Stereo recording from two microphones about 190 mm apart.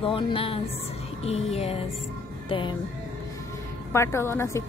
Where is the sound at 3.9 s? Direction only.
15° left (ahead or behind).